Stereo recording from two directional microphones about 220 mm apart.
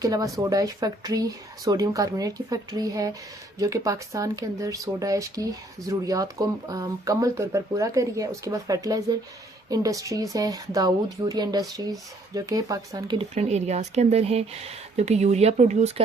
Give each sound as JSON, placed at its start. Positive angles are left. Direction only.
{"t": 0.0, "sound": "speech", "side_deg": -15}